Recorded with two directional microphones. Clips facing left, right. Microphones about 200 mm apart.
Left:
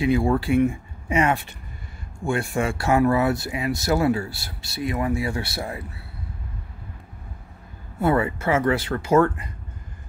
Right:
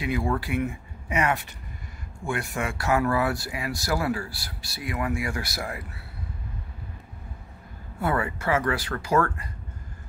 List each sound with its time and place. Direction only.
0.0 s speech: 25° left (ahead or behind)
8.0 s speech: 25° left (ahead or behind)